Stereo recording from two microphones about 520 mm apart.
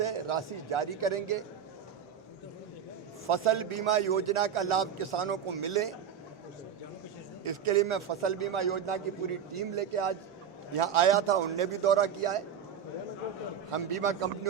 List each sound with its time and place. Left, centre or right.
0.0 s a man's voice: right
3.2 s a man's voice: right
7.4 s a man's voice: right
13.7 s a man's voice: right